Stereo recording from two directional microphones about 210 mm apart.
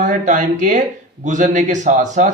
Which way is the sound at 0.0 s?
35° right (ahead or behind).